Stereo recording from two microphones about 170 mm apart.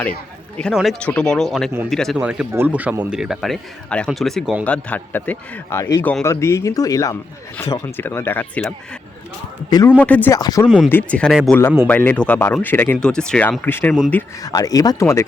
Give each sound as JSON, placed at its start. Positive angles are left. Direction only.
{"t": 0.6, "sound": "a man's voice", "side_deg": 0}
{"t": 9.6, "sound": "speech", "side_deg": 25}
{"t": 10.0, "sound": "a man's voice", "side_deg": 10}
{"t": 10.8, "sound": "a man's voice", "side_deg": 10}
{"t": 14.4, "sound": "speech", "side_deg": 20}